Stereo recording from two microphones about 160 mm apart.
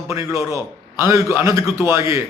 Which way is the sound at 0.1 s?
20° right (ahead or behind).